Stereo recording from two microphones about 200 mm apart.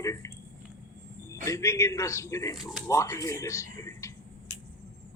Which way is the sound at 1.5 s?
15° left (ahead or behind).